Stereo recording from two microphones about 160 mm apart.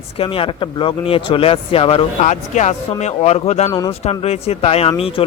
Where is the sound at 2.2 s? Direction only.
50° left (ahead or behind).